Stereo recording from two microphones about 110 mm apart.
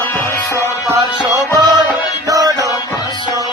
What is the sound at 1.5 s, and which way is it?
Music, 40° right (ahead or behind).